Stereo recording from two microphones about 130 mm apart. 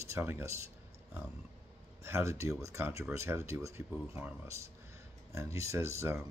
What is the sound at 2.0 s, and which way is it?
Speech, 20° right (ahead or behind).